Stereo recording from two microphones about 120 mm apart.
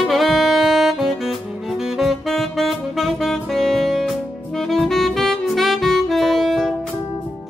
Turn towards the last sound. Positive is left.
turn(degrees=0)  # may be behind; listen again after turning